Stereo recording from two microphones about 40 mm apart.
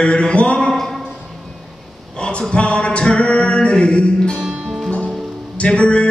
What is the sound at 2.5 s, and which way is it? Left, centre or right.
Music, left.